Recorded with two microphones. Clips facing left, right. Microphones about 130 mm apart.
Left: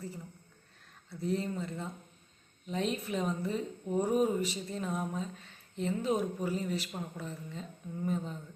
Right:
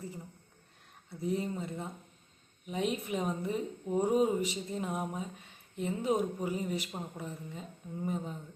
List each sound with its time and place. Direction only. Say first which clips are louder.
1.1 s speech: even; 15° right (ahead or behind)